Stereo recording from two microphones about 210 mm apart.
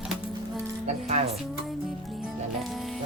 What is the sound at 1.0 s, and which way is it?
Speech, 30° right (ahead or behind).